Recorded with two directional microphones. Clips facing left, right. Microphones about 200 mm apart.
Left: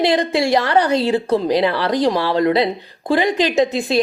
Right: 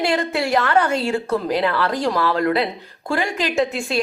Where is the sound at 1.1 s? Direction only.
30° left (ahead or behind).